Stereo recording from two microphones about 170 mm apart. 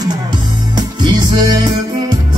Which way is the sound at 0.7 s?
25° right (ahead or behind).